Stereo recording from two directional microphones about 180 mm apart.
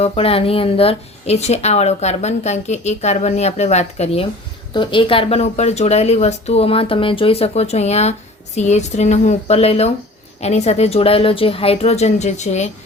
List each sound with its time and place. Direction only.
0.0 s a woman's voice: 30° left (ahead or behind)